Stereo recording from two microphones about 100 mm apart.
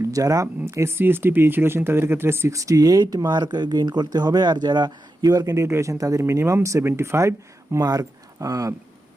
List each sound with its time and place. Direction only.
0.1 s speech: 35° right (ahead or behind)